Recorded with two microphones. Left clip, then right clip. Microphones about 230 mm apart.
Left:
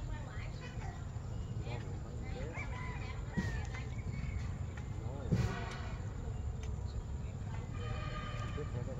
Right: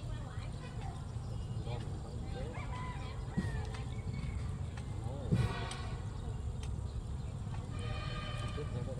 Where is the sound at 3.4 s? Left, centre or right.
Left.